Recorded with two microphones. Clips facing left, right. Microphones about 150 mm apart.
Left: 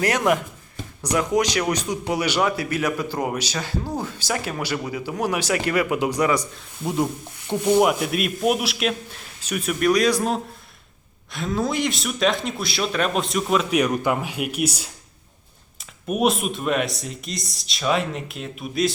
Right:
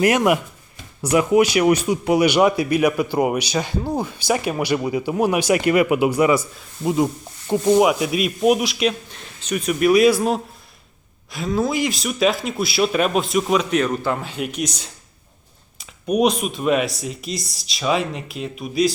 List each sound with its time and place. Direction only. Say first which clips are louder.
0.0 s speech: right 4 dB; 15° right (ahead or behind)